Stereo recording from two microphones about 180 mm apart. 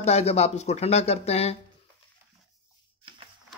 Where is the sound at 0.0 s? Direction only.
35° left (ahead or behind).